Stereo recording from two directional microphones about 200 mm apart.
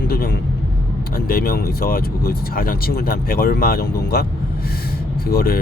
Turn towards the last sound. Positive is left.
turn(degrees=50)  # may be behind; listen again after turning